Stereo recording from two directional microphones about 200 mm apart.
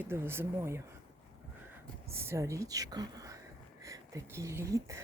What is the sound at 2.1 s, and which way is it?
Speech, 10° right (ahead or behind).